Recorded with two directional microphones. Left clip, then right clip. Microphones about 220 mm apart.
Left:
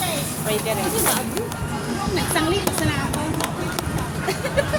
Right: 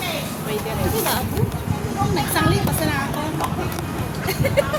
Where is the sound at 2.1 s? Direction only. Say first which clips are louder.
Even; 25° right (ahead or behind).